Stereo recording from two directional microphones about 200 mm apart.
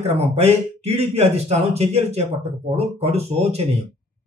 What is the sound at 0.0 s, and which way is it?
Speech, 30° right (ahead or behind).